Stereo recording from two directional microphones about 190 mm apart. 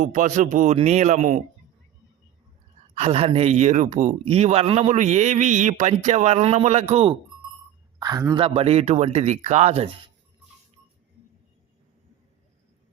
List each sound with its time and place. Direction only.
0.0 s speech: 40° right (ahead or behind)
3.0 s speech: 30° right (ahead or behind)
7.9 s speech: 20° right (ahead or behind)
8.4 s speech: 30° right (ahead or behind)